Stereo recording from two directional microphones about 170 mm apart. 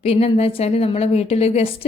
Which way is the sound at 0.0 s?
35° left (ahead or behind).